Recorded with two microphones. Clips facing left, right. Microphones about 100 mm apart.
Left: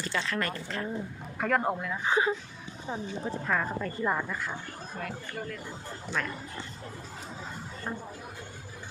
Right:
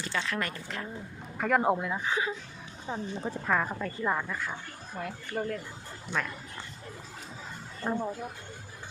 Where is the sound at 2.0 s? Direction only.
30° left (ahead or behind).